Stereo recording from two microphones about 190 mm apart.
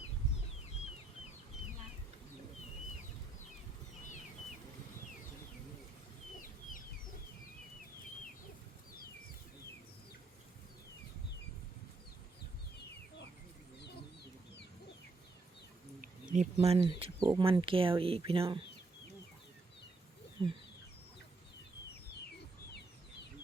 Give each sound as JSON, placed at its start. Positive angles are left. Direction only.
{"t": 16.0, "sound": "speech", "side_deg": -40}
{"t": 20.4, "sound": "bird", "side_deg": -20}